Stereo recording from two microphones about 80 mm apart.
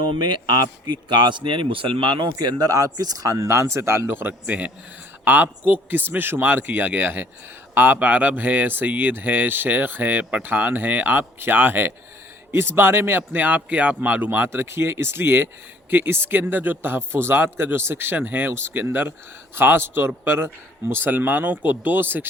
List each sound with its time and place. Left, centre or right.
0.0 s speech: right
2.3 s speech: right